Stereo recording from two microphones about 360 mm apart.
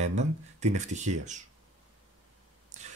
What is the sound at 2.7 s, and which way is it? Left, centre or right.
Whispering, centre.